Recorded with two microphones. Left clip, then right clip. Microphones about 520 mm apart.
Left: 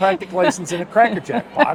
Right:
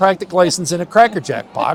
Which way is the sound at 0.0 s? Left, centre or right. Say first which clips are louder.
Right 3 dB; right.